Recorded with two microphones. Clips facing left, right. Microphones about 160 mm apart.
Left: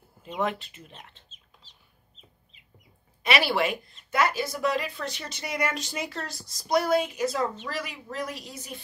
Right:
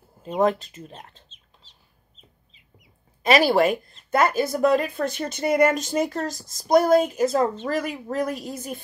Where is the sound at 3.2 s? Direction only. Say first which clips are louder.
Right 7 dB; 45° right (ahead or behind).